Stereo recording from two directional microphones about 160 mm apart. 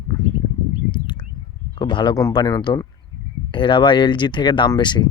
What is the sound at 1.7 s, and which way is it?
Speech, 30° left (ahead or behind).